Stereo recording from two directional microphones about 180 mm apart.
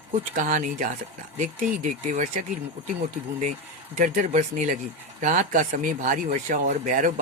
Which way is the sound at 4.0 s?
45° right (ahead or behind).